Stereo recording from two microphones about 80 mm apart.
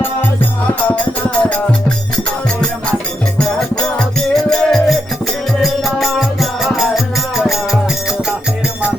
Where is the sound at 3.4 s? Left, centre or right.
Centre.